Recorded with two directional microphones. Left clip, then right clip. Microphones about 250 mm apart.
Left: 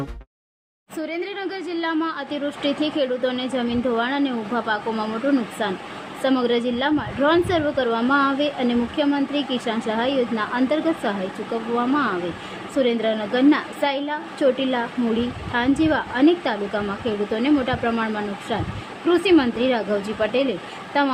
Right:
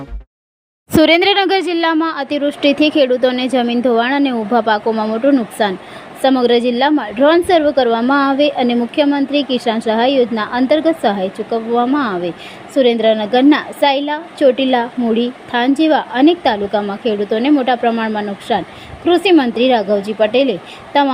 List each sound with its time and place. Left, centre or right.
0.9 s a woman's voice: right; by 21.1 s centre